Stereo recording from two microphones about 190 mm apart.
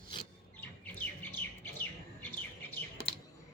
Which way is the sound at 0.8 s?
10° left (ahead or behind).